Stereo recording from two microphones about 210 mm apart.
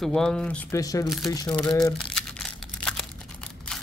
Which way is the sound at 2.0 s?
5° left (ahead or behind).